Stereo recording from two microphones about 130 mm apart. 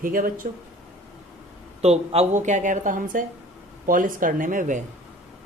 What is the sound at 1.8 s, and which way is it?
A woman's voice, 55° right (ahead or behind).